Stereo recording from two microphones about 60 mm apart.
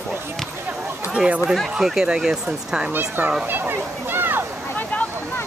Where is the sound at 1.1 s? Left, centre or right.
Centre.